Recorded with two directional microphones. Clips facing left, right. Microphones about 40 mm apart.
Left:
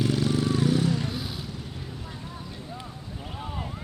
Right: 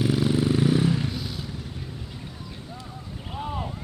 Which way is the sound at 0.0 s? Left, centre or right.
Centre.